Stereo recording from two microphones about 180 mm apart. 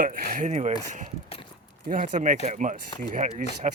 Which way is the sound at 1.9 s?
45° right (ahead or behind).